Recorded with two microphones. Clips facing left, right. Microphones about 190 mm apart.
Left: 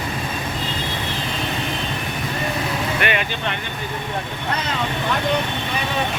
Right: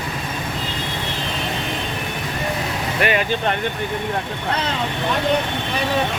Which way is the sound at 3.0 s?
35° right (ahead or behind).